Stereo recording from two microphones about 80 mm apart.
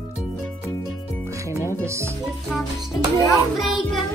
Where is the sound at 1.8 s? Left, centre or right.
Right.